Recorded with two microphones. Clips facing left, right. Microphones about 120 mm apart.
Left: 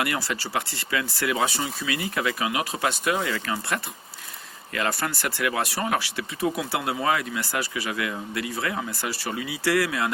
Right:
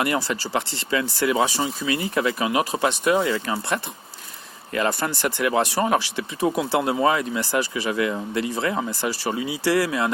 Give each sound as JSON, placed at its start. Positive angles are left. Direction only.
{"t": 0.0, "sound": "speech", "side_deg": -25}